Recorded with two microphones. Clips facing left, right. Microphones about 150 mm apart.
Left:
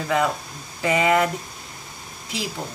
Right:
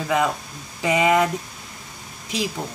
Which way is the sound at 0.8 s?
10° right (ahead or behind).